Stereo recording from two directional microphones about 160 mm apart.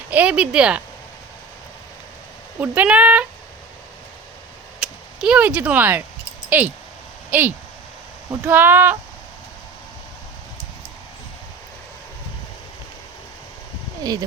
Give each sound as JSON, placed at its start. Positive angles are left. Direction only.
{"t": 0.1, "sound": "speech", "side_deg": -10}
{"t": 2.6, "sound": "speech", "side_deg": -10}
{"t": 4.8, "sound": "speech", "side_deg": -5}
{"t": 14.0, "sound": "speech", "side_deg": -25}